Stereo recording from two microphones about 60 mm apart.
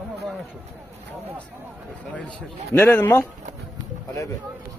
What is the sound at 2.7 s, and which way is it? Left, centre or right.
Speech, left.